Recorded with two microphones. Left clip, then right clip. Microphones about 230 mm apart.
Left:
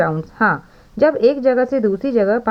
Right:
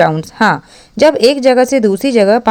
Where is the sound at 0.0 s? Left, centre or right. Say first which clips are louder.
Right 6 dB; right.